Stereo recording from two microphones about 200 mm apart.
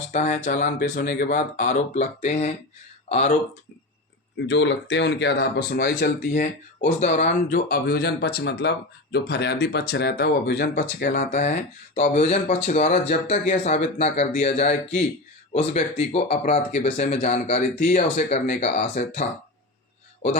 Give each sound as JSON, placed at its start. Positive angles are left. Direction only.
{"t": 0.1, "sound": "speech", "side_deg": 35}
{"t": 4.4, "sound": "speech", "side_deg": 65}
{"t": 11.2, "sound": "speech", "side_deg": 35}